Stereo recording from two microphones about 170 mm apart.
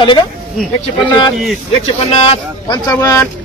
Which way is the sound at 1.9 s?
35° left (ahead or behind).